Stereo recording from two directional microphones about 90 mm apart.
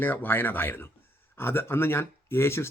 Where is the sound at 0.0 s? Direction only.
20° left (ahead or behind).